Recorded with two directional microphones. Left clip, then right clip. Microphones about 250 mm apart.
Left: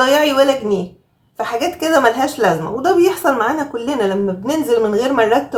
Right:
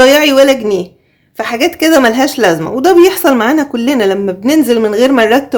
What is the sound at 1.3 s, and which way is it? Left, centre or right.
A woman's voice, right.